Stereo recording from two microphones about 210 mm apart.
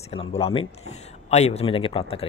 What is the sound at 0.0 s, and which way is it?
Speech, 30° left (ahead or behind).